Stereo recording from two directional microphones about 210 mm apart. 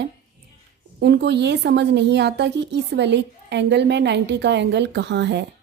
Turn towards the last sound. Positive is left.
turn(degrees=-55)  # may be behind; listen again after turning